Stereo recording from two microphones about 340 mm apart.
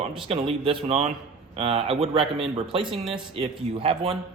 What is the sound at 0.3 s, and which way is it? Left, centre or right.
A man's voice, centre.